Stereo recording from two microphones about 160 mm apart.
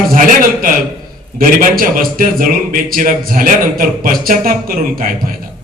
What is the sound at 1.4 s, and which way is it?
Speech, 60° right (ahead or behind).